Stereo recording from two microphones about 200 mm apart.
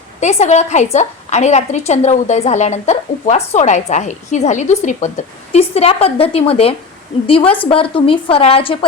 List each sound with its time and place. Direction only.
0.2 s a woman's voice: 35° left (ahead or behind)